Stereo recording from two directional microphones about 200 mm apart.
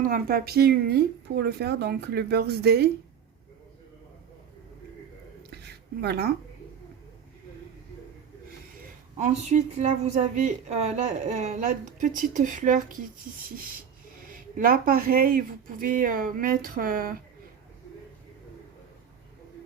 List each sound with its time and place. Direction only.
0.0 s speech: 45° right (ahead or behind)
5.6 s a sound: 55° right (ahead or behind)
9.1 s a woman's voice: 35° right (ahead or behind)
14.6 s speech: 45° right (ahead or behind)